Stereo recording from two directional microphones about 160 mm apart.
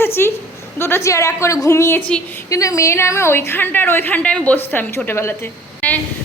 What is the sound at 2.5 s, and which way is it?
A woman's voice, 20° left (ahead or behind).